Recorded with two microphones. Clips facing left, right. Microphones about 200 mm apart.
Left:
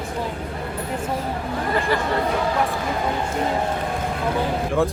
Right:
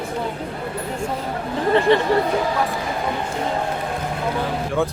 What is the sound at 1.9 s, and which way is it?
Speech, 25° right (ahead or behind).